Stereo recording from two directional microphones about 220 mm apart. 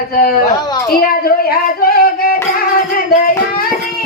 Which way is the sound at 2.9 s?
40° left (ahead or behind).